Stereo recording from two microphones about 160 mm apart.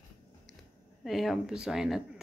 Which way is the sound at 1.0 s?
Centre (ahead or behind).